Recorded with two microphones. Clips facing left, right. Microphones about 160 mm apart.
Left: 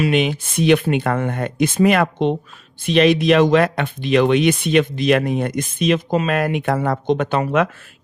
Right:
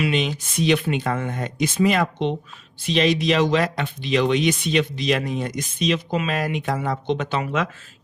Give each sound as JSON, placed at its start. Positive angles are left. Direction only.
{"t": 0.1, "sound": "speech", "side_deg": 55}